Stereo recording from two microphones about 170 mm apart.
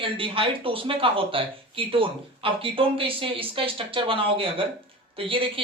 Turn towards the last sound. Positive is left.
turn(degrees=-30)  # may be behind; listen again after turning